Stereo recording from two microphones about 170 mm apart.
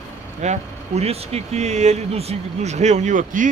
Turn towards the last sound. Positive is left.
turn(degrees=-50)  # may be behind; listen again after turning